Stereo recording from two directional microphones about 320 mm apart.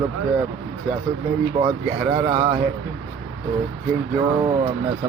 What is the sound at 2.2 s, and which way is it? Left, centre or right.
Speech, centre.